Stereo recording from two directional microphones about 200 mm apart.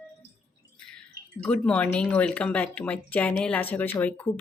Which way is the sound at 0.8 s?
5° left (ahead or behind).